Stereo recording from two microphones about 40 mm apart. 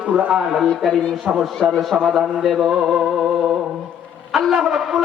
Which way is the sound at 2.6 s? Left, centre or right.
Centre.